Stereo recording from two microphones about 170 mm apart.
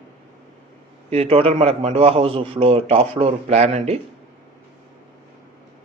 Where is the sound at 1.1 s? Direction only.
35° right (ahead or behind).